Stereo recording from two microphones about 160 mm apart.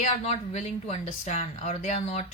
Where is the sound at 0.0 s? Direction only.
45° left (ahead or behind).